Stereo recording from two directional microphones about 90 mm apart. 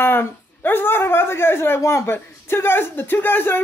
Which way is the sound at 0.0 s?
25° left (ahead or behind).